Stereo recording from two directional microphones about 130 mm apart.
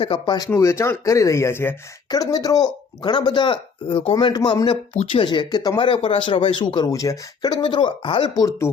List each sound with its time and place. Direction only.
0.0 s speech: 40° left (ahead or behind)
8.3 s speech: 25° left (ahead or behind)